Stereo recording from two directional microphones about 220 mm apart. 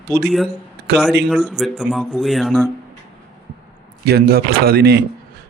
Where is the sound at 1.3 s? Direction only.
Centre (ahead or behind).